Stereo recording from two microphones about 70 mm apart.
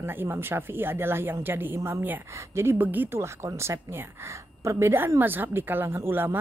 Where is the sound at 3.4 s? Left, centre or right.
Right.